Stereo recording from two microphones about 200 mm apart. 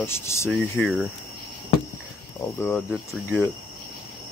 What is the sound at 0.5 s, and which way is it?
Speech, centre (ahead or behind).